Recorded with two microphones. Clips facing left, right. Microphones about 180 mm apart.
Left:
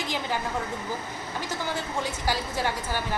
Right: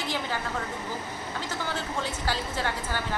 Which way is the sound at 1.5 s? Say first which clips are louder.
Left 2 dB; 10° left (ahead or behind).